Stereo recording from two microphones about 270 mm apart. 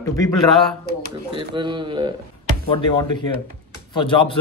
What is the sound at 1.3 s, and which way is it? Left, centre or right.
Speech, centre.